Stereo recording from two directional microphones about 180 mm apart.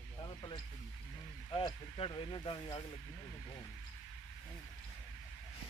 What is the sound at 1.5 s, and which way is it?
Speech, 25° left (ahead or behind).